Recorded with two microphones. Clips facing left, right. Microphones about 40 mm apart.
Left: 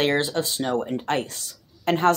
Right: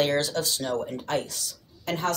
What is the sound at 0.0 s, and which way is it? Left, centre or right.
Speech, left.